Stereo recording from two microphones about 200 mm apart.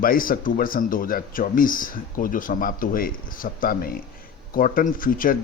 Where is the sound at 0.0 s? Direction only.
45° left (ahead or behind).